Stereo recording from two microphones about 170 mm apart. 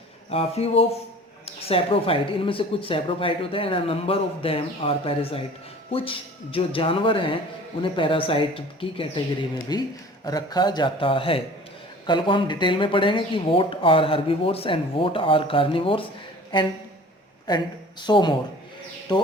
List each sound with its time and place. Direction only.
0.3 s speech: 35° left (ahead or behind)
18.0 s speech: 25° left (ahead or behind)